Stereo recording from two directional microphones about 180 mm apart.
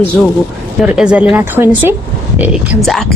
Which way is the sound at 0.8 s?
5° right (ahead or behind).